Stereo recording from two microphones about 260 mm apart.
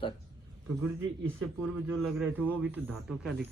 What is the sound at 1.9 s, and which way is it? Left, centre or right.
A man's voice, centre.